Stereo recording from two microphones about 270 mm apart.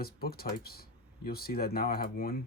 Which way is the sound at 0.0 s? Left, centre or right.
Left.